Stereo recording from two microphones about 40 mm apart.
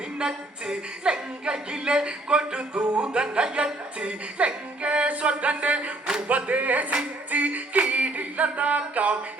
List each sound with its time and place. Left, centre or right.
0.2 s speech: right
6.2 s music: right